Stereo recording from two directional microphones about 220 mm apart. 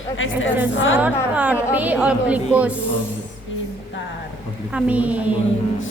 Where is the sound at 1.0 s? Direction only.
5° right (ahead or behind).